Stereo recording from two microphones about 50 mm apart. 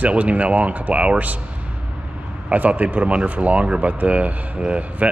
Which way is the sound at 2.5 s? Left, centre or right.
Right.